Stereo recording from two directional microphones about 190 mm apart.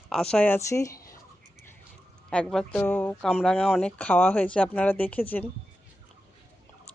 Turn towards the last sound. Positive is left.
turn(degrees=10)  # may be behind; listen again after turning